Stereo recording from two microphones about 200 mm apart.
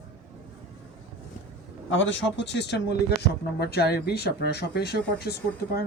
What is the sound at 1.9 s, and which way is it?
Speech, 70° left (ahead or behind).